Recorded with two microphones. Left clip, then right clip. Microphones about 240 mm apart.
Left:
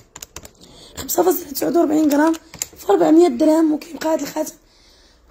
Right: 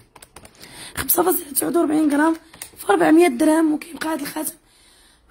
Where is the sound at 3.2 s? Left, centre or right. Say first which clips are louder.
Left 2 dB; right.